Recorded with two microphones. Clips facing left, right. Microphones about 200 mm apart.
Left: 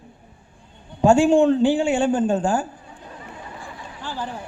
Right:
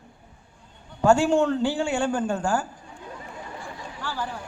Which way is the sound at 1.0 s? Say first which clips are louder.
Left 4 dB; 15° left (ahead or behind).